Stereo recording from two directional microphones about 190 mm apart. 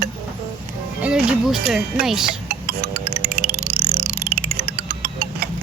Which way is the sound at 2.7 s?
55° right (ahead or behind).